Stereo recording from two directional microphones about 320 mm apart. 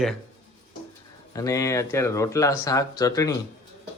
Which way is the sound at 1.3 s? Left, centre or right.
Centre.